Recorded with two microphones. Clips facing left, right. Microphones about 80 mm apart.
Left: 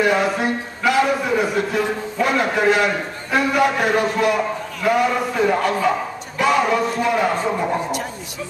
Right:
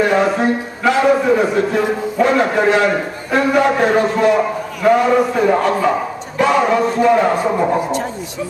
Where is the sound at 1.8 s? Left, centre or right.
Right.